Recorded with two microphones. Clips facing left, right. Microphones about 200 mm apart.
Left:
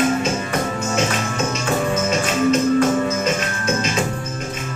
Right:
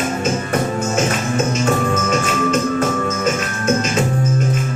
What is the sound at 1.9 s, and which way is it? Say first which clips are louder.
Music: right 1 dB; 50° right (ahead or behind).